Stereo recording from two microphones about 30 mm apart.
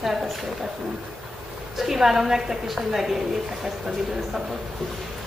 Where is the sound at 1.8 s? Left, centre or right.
Centre.